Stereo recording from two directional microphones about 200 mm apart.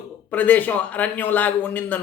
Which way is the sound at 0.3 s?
10° left (ahead or behind).